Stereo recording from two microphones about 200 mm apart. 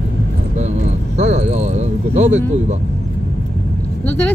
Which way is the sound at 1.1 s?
35° right (ahead or behind).